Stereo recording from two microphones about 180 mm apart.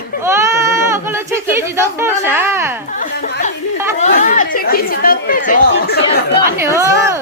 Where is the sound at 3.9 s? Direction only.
45° left (ahead or behind).